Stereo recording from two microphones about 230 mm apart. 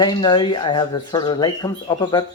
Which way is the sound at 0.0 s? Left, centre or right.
Centre.